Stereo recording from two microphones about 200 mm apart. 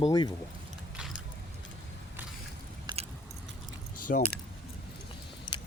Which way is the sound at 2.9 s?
20° right (ahead or behind).